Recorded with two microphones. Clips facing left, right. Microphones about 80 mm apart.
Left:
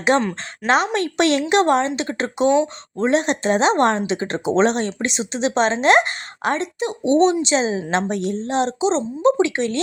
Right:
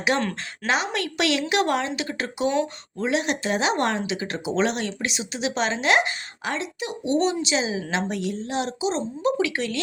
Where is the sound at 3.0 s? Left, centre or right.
Left.